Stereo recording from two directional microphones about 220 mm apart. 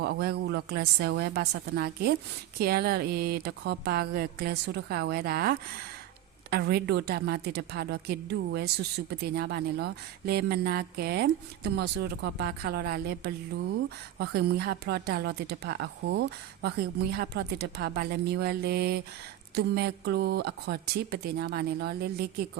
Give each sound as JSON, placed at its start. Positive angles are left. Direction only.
{"t": 0.0, "sound": "a woman's voice", "side_deg": -45}